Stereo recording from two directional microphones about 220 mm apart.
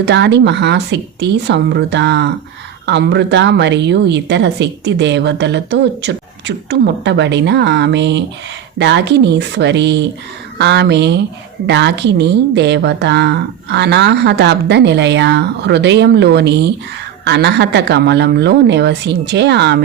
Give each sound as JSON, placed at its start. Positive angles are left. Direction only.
{"t": 0.0, "sound": "a woman's voice", "side_deg": -50}